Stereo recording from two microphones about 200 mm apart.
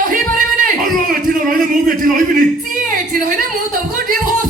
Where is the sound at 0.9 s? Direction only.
45° right (ahead or behind).